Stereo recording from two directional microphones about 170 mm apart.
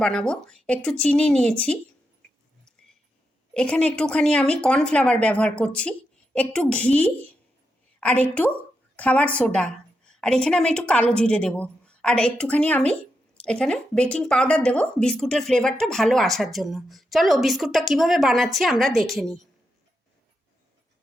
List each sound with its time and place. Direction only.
0.0 s a woman's voice: 5° left (ahead or behind)
3.5 s a woman's voice: 5° left (ahead or behind)